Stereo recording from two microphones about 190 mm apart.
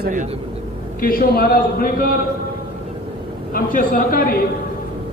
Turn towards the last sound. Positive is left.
turn(degrees=50)  # may be behind; listen again after turning